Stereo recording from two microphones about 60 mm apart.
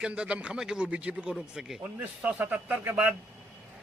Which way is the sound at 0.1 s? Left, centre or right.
Centre.